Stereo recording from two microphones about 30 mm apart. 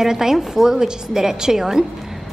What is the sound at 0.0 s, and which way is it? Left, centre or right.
A woman's voice, centre.